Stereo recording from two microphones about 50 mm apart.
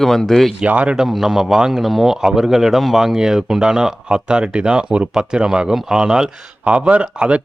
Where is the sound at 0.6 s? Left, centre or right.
Right.